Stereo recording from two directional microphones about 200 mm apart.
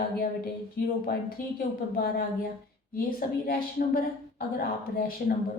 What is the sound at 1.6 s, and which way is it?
A woman's voice, 45° left (ahead or behind).